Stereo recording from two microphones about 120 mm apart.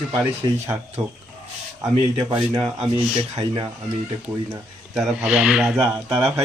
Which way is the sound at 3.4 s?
35° right (ahead or behind).